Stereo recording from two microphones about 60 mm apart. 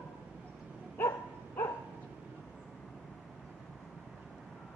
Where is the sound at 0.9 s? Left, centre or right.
Left.